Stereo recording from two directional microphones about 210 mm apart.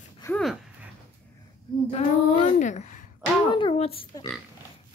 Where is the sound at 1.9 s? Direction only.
30° left (ahead or behind).